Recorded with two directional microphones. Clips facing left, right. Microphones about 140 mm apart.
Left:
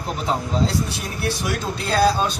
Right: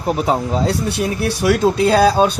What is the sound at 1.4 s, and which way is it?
Speech, 80° right.